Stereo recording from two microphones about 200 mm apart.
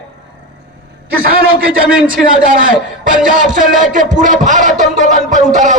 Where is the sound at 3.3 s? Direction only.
40° right (ahead or behind).